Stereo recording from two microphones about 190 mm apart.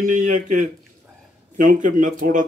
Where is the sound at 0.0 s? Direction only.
45° right (ahead or behind).